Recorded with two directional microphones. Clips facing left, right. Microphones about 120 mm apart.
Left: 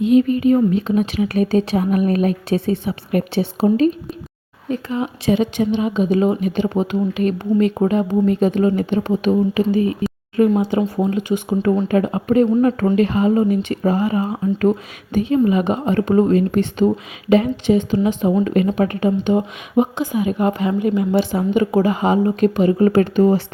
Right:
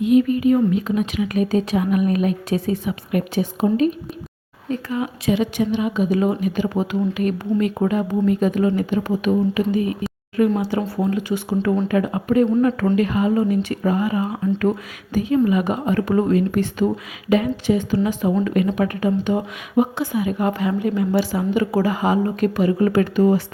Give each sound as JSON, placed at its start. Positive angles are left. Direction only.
{"t": 0.0, "sound": "a woman's voice", "side_deg": 30}
{"t": 10.5, "sound": "a woman's voice", "side_deg": 20}
{"t": 11.6, "sound": "a woman's voice", "side_deg": 30}